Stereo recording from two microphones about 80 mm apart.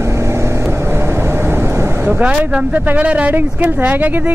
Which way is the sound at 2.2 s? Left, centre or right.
Centre.